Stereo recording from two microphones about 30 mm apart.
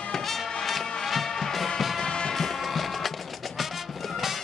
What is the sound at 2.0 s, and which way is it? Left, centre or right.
Music, left.